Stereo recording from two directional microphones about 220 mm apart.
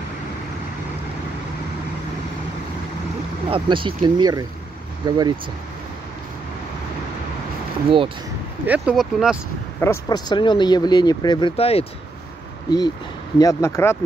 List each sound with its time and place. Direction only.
3.4 s speech: 25° right (ahead or behind)
8.6 s speech: 5° right (ahead or behind)
9.8 s speech: 15° left (ahead or behind)